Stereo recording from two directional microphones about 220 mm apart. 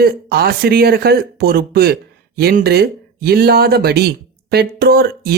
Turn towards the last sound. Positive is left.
turn(degrees=-45)  # may be behind; listen again after turning